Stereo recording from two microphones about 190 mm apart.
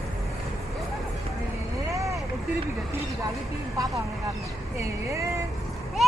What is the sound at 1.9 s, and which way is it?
Vehicle, 15° right (ahead or behind).